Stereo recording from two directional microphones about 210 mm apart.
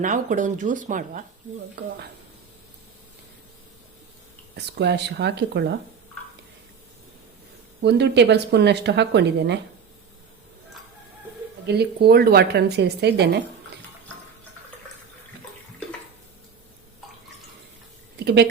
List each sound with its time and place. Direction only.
0.0 s speech: 40° right (ahead or behind)
4.5 s speech: 55° right (ahead or behind)
7.8 s speech: 55° right (ahead or behind)
11.6 s speech: 50° right (ahead or behind)